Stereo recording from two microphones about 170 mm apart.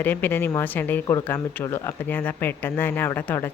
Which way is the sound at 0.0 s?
10° left (ahead or behind).